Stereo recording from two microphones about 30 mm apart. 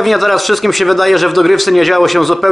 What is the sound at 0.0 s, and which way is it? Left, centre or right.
Speech, centre.